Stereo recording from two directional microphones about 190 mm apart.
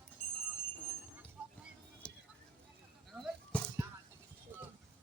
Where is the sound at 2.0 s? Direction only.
5° left (ahead or behind).